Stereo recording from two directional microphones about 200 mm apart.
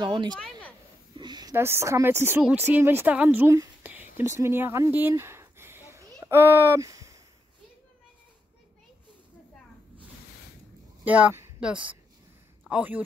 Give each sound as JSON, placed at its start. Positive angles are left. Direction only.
{"t": 0.0, "sound": "speech", "side_deg": -25}
{"t": 0.3, "sound": "speech", "side_deg": 5}
{"t": 1.1, "sound": "a woman's voice", "side_deg": -20}
{"t": 11.1, "sound": "speech", "side_deg": -5}